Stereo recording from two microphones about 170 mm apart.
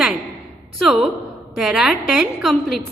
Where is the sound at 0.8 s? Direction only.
Centre (ahead or behind).